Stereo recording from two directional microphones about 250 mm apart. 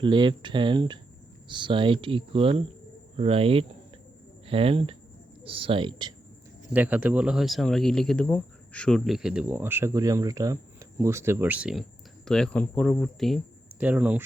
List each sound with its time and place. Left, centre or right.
0.0 s speech: centre
6.7 s speech: centre